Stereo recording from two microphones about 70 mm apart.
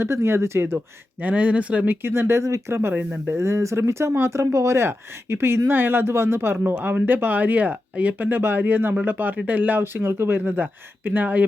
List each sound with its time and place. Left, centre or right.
0.0 s speech: right
1.2 s speech: right
2.9 s speech: right
3.4 s speech: right